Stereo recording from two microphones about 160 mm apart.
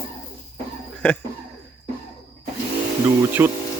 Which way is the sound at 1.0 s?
10° left (ahead or behind).